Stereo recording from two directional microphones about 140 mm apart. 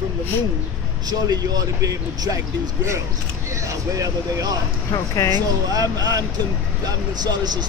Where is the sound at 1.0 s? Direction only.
30° right (ahead or behind).